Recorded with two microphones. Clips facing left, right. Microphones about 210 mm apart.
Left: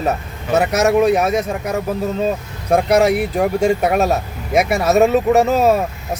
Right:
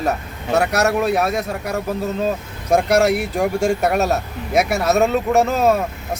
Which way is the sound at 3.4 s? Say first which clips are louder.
Left 2 dB; 5° left (ahead or behind).